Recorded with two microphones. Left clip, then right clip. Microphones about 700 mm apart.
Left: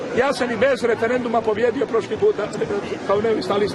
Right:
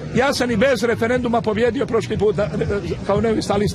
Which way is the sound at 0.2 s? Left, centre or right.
Right.